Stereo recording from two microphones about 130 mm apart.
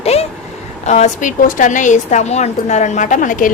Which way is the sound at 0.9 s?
65° left (ahead or behind).